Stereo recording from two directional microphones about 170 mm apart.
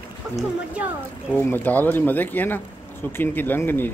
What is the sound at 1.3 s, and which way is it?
Speech, 10° left (ahead or behind).